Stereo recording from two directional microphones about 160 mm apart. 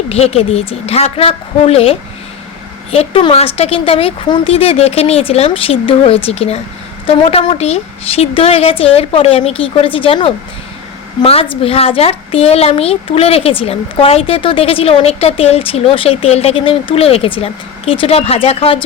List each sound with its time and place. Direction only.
0.1 s a child's voice: 40° left (ahead or behind)